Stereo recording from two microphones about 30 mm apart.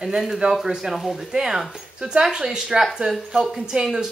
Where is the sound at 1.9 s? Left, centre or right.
Right.